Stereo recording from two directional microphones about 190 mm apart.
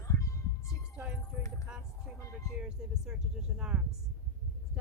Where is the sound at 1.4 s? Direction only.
15° left (ahead or behind).